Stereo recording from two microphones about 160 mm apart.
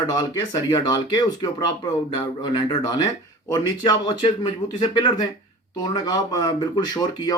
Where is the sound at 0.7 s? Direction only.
25° left (ahead or behind).